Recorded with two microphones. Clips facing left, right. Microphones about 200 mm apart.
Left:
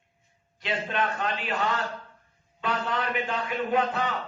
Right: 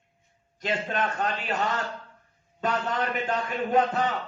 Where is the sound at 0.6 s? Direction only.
45° right (ahead or behind).